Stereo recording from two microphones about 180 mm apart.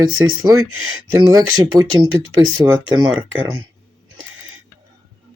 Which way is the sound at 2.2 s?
90° right.